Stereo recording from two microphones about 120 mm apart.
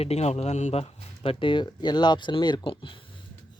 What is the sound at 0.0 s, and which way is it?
Speech, 60° left (ahead or behind).